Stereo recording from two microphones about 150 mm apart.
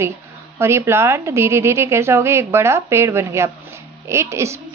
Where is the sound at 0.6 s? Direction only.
15° right (ahead or behind).